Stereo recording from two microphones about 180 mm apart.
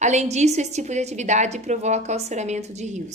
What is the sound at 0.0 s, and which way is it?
A woman's voice, 40° right (ahead or behind).